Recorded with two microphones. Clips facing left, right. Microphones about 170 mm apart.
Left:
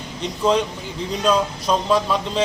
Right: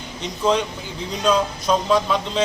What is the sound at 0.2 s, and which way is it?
Speech, centre (ahead or behind).